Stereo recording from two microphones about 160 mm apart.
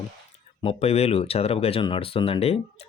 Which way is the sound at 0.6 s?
40° left (ahead or behind).